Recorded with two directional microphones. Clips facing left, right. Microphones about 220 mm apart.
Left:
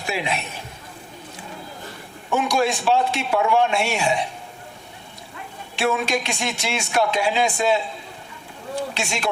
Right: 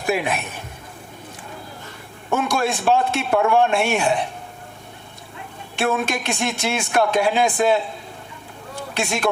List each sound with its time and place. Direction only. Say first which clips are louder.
0.0 s a man's voice: right 4 dB; 50° right (ahead or behind)
2.3 s speech: even; 55° right (ahead or behind)
5.7 s speech: even; 55° right (ahead or behind)
9.0 s speech: right 8 dB; 55° right (ahead or behind)